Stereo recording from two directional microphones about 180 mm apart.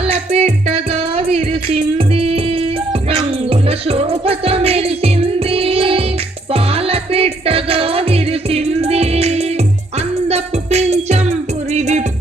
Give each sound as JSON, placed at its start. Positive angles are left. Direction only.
{"t": 0.0, "sound": "music", "side_deg": -35}